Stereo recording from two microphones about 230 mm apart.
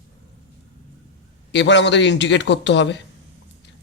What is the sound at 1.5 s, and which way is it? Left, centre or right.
Speech, left.